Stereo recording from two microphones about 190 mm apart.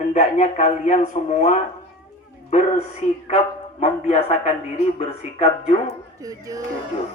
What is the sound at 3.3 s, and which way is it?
A man's voice, 30° left (ahead or behind).